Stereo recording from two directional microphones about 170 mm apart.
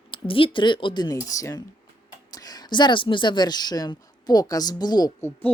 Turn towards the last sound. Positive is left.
turn(degrees=25)  # may be behind; listen again after turning